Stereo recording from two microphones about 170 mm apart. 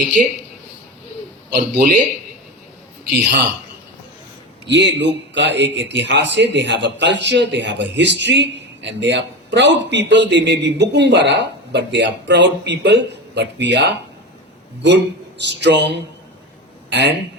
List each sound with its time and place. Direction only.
1.5 s speech: 65° right (ahead or behind)
4.6 s a man's voice: 90° right
16.9 s a man's voice: 90° right